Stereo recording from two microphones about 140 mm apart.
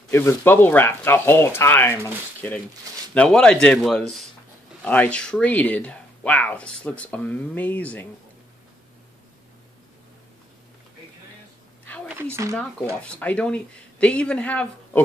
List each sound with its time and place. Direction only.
0.1 s speech: 15° left (ahead or behind)
3.2 s a man's voice: 5° left (ahead or behind)
12.1 s speech: 15° right (ahead or behind)
13.0 s speech: 10° left (ahead or behind)